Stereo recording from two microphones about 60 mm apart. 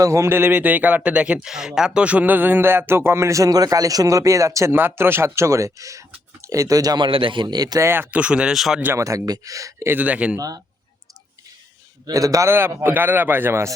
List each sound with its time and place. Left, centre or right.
0.0 s a man's voice: right
0.3 s speech: right
0.5 s speech: right
1.4 s speech: centre; by 4.7 s right
4.7 s speech: right
7.8 s speech: right
8.1 s speech: centre
8.5 s speech: centre
9.0 s speech: right
9.8 s speech: right
10.1 s speech: right
10.3 s a man's voice: right
12.1 s a man's voice: right
12.5 s speech: right